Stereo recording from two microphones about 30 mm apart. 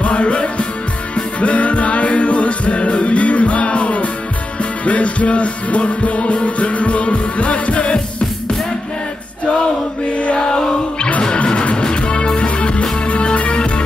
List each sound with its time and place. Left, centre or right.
0.0 s music: left
10.3 s chant: left
11.6 s music: left